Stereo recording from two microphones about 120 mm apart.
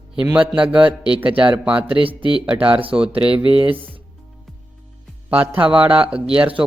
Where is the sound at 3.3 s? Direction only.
50° right (ahead or behind).